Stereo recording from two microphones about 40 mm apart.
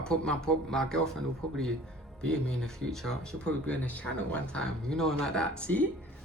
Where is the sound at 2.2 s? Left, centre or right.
Left.